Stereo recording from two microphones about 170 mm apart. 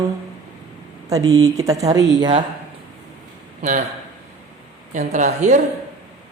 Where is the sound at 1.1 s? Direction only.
20° right (ahead or behind).